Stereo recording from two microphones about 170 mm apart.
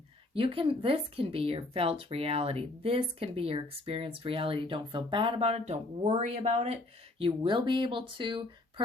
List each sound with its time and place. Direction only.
0.3 s speech: 30° right (ahead or behind)
7.2 s speech: 30° right (ahead or behind)